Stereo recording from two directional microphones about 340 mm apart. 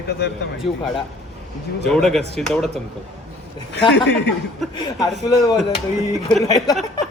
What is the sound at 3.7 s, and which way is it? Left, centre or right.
Speech, left.